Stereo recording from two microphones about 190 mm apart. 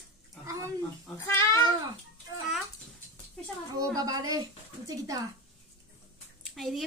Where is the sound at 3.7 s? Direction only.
20° right (ahead or behind).